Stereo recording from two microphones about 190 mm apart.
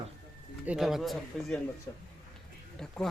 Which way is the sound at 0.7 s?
Centre (ahead or behind).